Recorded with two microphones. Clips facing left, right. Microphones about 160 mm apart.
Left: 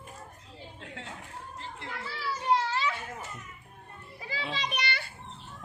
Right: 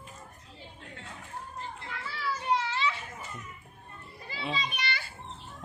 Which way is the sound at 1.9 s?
40° left (ahead or behind).